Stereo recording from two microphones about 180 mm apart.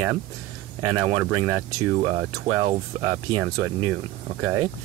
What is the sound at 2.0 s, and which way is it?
Speech, 30° right (ahead or behind).